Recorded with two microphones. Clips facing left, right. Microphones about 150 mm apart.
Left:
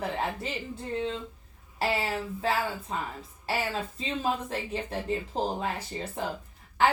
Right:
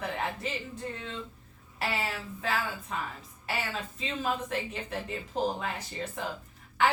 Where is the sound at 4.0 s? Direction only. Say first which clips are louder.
Left 1 dB; 30° left (ahead or behind).